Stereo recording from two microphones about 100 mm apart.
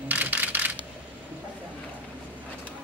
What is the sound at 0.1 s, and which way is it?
Coin, 15° right (ahead or behind).